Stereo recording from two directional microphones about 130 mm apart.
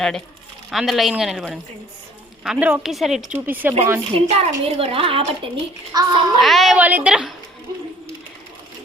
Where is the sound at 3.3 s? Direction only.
15° right (ahead or behind).